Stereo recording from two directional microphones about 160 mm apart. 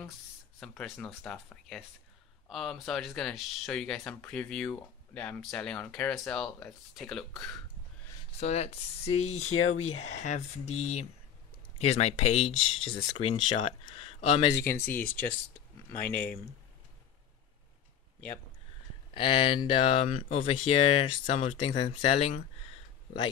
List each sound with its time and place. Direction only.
0.6 s speech: 5° left (ahead or behind)
8.4 s speech: 40° left (ahead or behind)
14.5 s speech: 15° left (ahead or behind)
19.1 s speech: 30° left (ahead or behind)